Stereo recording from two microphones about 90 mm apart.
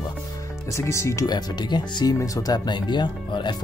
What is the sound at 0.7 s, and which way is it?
Speech, 35° left (ahead or behind).